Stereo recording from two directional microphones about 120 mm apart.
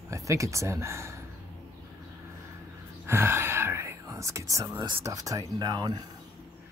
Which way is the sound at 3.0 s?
20° right (ahead or behind).